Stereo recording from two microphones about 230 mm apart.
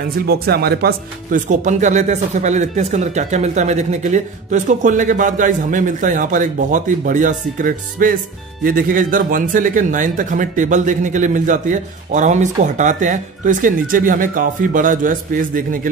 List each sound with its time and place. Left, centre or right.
0.3 s speech: right